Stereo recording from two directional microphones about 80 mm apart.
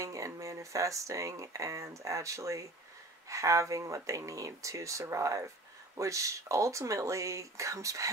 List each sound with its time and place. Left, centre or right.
0.0 s speech: right